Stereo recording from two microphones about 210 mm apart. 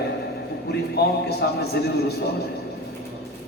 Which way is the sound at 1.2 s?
50° left (ahead or behind).